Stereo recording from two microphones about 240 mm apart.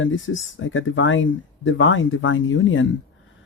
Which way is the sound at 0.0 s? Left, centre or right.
Left.